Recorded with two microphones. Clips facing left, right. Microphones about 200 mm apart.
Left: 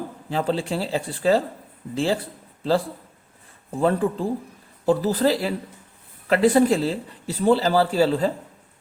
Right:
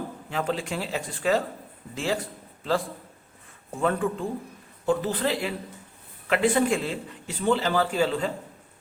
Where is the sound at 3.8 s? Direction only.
35° left (ahead or behind).